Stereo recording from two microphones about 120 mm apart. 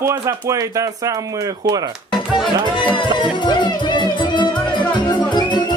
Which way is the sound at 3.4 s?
40° left (ahead or behind).